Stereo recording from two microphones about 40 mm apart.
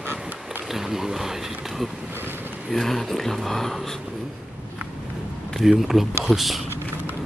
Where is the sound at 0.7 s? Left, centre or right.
Centre.